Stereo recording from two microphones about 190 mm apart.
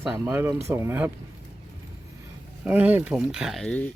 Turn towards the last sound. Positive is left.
turn(degrees=5)  # may be behind; listen again after turning